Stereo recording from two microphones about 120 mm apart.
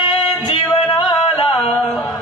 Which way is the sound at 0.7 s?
40° left (ahead or behind).